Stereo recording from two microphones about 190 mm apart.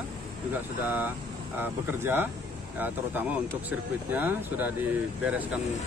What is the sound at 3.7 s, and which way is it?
Speech, 10° right (ahead or behind).